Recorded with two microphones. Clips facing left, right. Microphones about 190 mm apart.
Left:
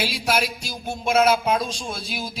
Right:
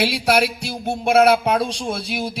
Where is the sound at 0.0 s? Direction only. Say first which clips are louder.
Right 6 dB; 65° right (ahead or behind).